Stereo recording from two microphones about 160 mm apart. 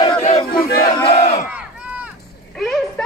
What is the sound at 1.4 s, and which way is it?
Crowd, 10° right (ahead or behind).